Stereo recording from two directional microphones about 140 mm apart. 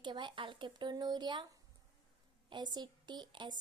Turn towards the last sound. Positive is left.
turn(degrees=-30)  # may be behind; listen again after turning